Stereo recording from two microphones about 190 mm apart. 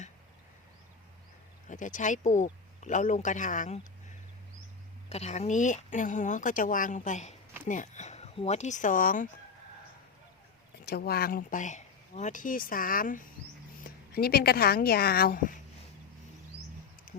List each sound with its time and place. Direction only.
1.6 s speech: 40° left (ahead or behind)
5.0 s speech: 35° left (ahead or behind)
10.8 s speech: 55° left (ahead or behind)
17.1 s a sound: 45° left (ahead or behind)